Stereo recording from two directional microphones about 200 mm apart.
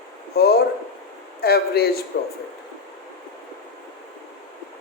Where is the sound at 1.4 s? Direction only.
55° left (ahead or behind).